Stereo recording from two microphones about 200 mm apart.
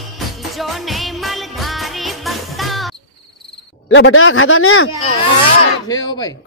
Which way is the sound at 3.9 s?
80° left.